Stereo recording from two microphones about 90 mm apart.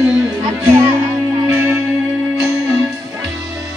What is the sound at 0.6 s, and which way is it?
Music, 25° right (ahead or behind).